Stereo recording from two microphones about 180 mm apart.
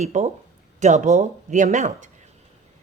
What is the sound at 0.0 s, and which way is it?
Speech, 40° right (ahead or behind).